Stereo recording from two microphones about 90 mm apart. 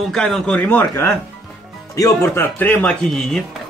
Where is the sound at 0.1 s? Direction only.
10° left (ahead or behind).